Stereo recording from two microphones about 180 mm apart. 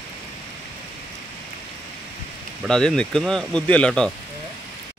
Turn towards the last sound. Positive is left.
turn(degrees=5)  # may be behind; listen again after turning